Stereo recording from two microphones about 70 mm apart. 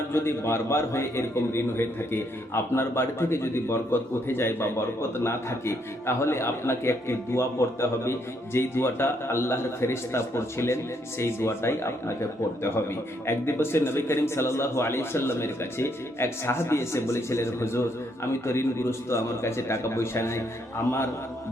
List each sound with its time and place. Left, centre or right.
0.1 s a man's voice: left